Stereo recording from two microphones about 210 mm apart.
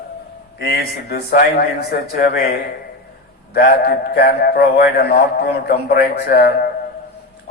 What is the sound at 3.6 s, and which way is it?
A man's voice, 50° left (ahead or behind).